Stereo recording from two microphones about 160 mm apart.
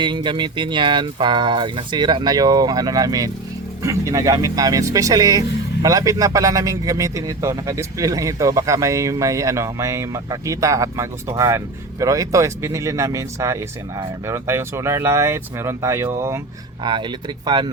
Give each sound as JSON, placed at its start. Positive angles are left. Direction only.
{"t": 0.0, "sound": "a man's voice", "side_deg": -30}
{"t": 16.8, "sound": "a man's voice", "side_deg": -30}